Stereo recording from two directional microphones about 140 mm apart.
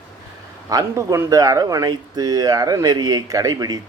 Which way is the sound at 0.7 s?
25° right (ahead or behind).